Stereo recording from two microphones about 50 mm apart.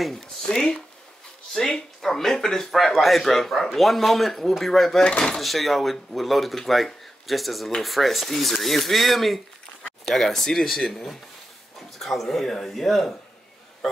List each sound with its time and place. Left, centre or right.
0.0 s speech: centre
5.0 s speech: left
5.4 s speech: centre